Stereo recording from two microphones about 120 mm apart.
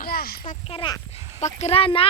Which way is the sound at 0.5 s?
90° left.